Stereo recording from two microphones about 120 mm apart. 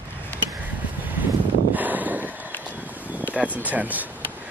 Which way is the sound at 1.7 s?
15° right (ahead or behind).